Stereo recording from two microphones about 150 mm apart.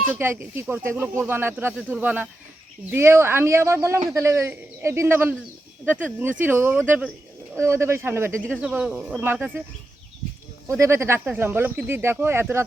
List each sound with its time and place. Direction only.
0.1 s speech: 15° right (ahead or behind)
10.8 s speech: 20° right (ahead or behind)